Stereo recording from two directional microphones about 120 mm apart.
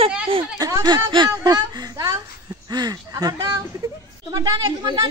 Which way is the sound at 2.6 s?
35° right (ahead or behind).